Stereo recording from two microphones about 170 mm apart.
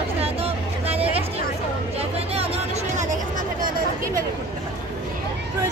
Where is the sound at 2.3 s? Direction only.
35° right (ahead or behind).